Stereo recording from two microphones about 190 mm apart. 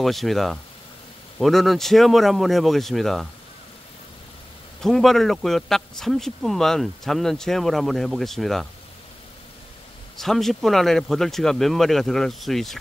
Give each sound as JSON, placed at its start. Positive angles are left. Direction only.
{"t": 0.0, "sound": "speech", "side_deg": 0}
{"t": 4.8, "sound": "speech", "side_deg": 0}
{"t": 10.1, "sound": "speech", "side_deg": 0}